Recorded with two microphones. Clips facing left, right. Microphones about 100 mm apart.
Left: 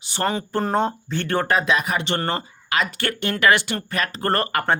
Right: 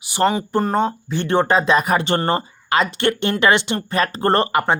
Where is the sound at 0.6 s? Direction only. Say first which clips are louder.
Right 1 dB; centre (ahead or behind).